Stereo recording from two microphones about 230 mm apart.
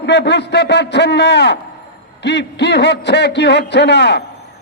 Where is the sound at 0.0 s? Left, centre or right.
Left.